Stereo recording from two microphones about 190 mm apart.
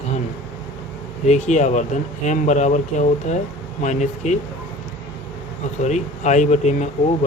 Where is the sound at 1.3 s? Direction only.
35° left (ahead or behind).